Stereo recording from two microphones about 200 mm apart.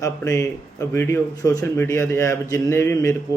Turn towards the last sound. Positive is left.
turn(degrees=15)  # may be behind; listen again after turning